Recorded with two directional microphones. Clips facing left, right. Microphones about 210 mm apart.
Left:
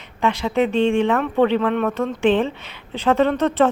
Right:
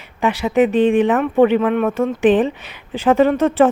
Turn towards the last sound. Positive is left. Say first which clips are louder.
# right 4 dB
turn(degrees=-15)  # may be behind; listen again after turning